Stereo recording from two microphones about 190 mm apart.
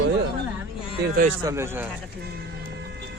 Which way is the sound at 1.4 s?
15° right (ahead or behind).